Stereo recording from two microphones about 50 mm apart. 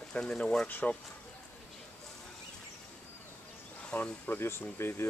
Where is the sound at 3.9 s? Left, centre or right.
Left.